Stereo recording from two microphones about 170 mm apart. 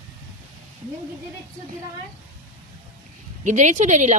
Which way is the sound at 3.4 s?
45° right (ahead or behind).